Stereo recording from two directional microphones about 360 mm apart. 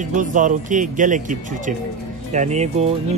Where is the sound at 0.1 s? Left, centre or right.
Right.